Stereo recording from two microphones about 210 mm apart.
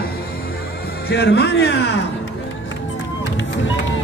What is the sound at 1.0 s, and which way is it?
Speech, 50° left (ahead or behind).